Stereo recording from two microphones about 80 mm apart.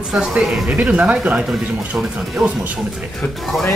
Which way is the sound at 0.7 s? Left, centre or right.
Centre.